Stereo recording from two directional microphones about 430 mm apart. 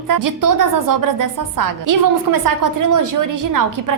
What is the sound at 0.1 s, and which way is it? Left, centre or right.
A woman's voice, right.